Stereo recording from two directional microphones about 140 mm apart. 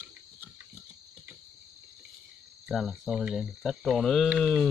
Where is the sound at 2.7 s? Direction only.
Centre (ahead or behind).